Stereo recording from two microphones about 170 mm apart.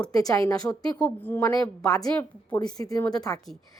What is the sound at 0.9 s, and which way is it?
Speech, 10° left (ahead or behind).